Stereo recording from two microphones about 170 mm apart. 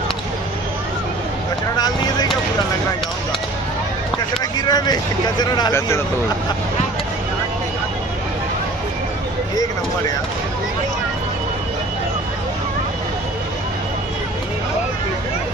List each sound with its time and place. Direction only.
4.6 s speech: 25° left (ahead or behind)